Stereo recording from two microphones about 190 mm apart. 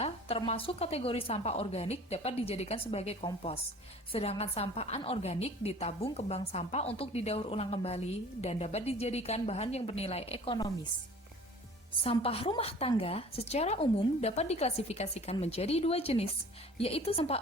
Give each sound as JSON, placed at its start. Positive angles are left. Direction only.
{"t": 0.0, "sound": "a woman's voice", "side_deg": 30}
{"t": 12.0, "sound": "a woman's voice", "side_deg": 30}